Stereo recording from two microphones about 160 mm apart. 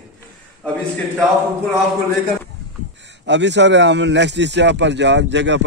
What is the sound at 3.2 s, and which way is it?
Speech, 90° right.